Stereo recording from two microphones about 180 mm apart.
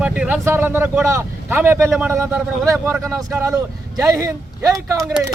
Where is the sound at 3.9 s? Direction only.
20° right (ahead or behind).